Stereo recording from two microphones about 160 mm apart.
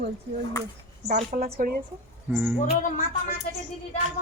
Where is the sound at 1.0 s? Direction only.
90° right.